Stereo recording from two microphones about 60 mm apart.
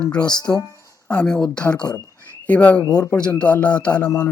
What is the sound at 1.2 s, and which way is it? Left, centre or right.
Speech, centre.